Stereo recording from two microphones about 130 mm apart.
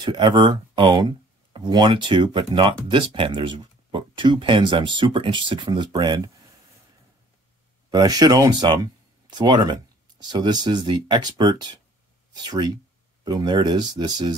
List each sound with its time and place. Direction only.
0.0 s speech: 35° right (ahead or behind)
7.9 s speech: 30° right (ahead or behind)